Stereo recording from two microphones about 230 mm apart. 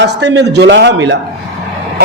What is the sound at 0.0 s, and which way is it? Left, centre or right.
Speech, right.